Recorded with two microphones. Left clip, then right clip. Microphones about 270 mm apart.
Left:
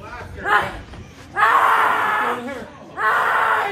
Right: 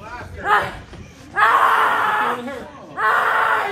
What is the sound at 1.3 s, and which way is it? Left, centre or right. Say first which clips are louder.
Screaming: even; centre.